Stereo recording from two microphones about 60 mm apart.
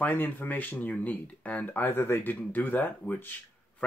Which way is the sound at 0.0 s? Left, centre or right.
Left.